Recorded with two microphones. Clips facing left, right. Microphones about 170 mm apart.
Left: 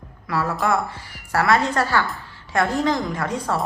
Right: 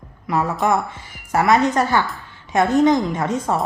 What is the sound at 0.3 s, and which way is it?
A woman's voice, 20° right (ahead or behind).